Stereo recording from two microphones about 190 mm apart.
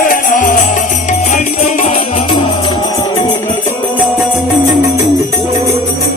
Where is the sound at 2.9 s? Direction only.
20° left (ahead or behind).